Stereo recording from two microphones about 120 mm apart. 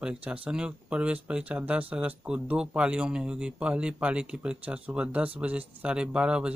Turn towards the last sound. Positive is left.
turn(degrees=-10)  # may be behind; listen again after turning